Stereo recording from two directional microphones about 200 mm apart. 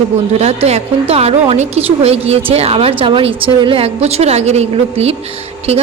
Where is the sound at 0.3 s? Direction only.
30° right (ahead or behind).